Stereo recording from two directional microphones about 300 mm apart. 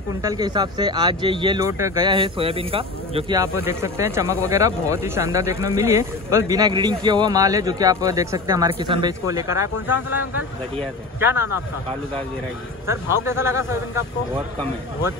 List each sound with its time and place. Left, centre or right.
0.2 s speech: centre
11.1 s speech: centre
12.8 s speech: centre